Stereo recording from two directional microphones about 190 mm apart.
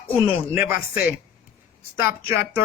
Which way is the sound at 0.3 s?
10° right (ahead or behind).